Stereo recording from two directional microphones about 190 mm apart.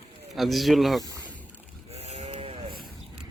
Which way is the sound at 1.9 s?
35° right (ahead or behind).